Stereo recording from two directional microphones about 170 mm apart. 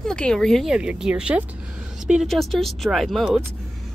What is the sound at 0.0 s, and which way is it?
Speech, 5° left (ahead or behind).